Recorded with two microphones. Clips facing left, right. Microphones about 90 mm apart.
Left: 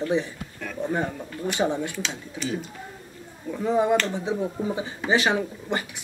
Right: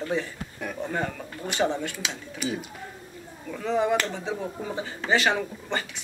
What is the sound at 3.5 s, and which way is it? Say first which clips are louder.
Speech: left 3 dB; 15° left (ahead or behind).